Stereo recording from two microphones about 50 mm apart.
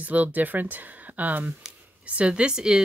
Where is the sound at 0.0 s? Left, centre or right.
Right.